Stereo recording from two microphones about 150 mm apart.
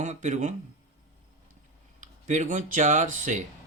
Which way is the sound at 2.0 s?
55° right (ahead or behind).